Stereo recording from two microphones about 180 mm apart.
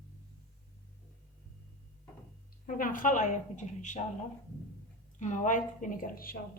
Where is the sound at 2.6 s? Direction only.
50° left (ahead or behind).